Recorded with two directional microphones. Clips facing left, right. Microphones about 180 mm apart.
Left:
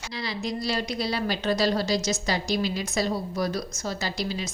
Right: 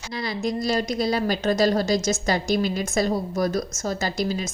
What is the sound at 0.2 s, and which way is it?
A woman's voice, 50° right (ahead or behind).